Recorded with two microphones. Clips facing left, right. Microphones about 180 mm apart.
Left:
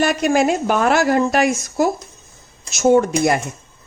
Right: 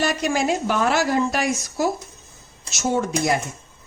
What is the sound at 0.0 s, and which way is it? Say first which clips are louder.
Speech: left 6 dB; 55° left (ahead or behind).